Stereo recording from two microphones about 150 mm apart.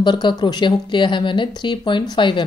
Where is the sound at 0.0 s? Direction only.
30° left (ahead or behind).